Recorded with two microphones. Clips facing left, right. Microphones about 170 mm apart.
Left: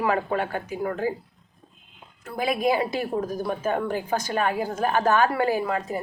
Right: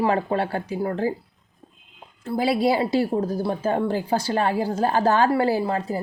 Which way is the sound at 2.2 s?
30° right (ahead or behind).